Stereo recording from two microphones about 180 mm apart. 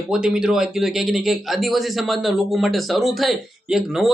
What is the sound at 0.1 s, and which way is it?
A man's voice, 5° right (ahead or behind).